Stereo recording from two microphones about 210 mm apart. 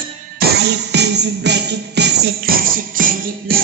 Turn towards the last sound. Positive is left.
turn(degrees=-40)  # may be behind; listen again after turning